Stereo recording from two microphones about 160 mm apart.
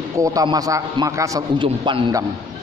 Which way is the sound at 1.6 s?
30° right (ahead or behind).